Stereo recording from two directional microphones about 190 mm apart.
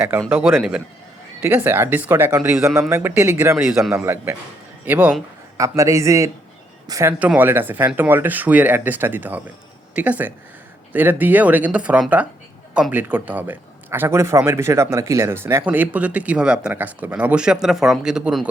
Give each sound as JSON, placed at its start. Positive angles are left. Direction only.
{"t": 0.1, "sound": "a man's voice", "side_deg": -10}
{"t": 7.1, "sound": "a man's voice", "side_deg": -5}